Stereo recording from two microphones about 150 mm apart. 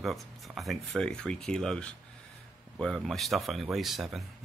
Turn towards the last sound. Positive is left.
turn(degrees=0)  # may be behind; listen again after turning